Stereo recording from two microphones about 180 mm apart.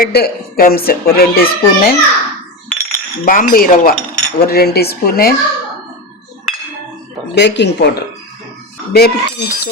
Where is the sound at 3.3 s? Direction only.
50° left (ahead or behind).